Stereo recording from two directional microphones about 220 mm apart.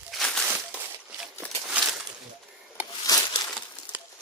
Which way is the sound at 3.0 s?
20° left (ahead or behind).